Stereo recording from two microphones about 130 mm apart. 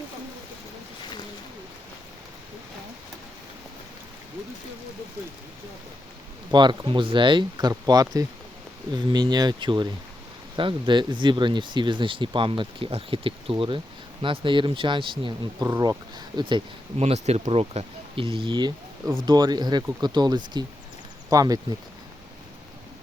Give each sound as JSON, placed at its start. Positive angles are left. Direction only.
{"t": 6.5, "sound": "speech", "side_deg": -35}
{"t": 15.6, "sound": "speech", "side_deg": -25}
{"t": 17.0, "sound": "speech", "side_deg": -55}